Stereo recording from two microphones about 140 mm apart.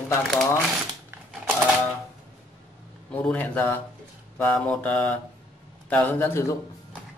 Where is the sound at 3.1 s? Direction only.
10° left (ahead or behind).